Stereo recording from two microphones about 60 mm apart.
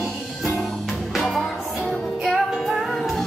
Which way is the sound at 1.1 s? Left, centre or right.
Centre.